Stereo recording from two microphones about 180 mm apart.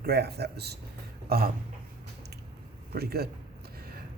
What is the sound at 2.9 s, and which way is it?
Speech, 60° right (ahead or behind).